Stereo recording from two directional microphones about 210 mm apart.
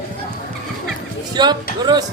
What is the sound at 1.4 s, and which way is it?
Speech, 20° right (ahead or behind).